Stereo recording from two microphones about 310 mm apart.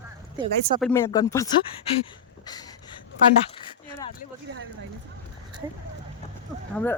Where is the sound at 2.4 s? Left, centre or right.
Centre.